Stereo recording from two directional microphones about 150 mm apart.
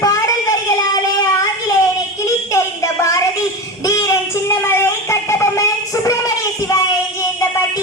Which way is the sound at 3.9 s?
20° left (ahead or behind).